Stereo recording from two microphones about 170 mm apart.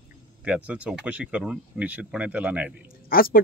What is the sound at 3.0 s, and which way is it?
Speech, 60° left (ahead or behind).